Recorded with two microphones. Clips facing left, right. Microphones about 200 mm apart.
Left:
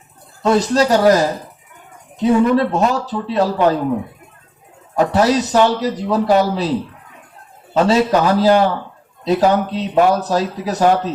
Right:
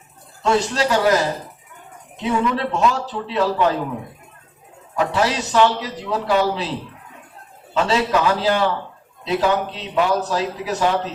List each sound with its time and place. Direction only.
0.4 s a man's voice: 40° left (ahead or behind)
2.2 s speech: 45° left (ahead or behind)
4.9 s a man's voice: 40° left (ahead or behind)
7.7 s a man's voice: 40° left (ahead or behind)